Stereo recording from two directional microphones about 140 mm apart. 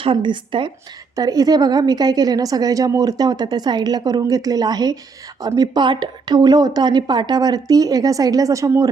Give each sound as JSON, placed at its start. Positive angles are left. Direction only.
{"t": 0.0, "sound": "a woman's voice", "side_deg": -35}